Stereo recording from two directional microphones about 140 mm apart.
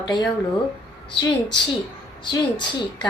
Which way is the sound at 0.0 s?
30° left (ahead or behind).